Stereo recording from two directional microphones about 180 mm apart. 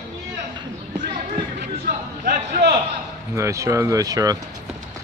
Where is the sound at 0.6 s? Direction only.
25° right (ahead or behind).